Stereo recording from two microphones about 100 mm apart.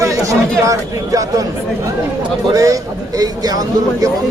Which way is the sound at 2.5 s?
35° right (ahead or behind).